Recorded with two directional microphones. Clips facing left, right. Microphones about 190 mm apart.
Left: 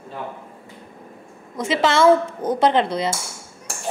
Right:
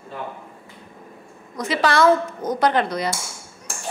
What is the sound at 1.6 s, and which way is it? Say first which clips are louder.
A woman's voice: left 1 dB; 25° left (ahead or behind).